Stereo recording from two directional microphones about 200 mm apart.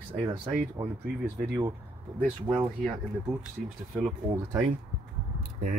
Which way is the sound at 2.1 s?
10° right (ahead or behind).